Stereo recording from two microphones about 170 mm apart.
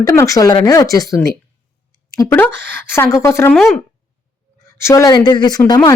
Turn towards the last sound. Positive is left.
turn(degrees=25)  # may be behind; listen again after turning